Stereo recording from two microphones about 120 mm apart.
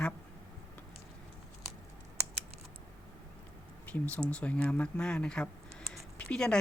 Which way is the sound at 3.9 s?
15° left (ahead or behind).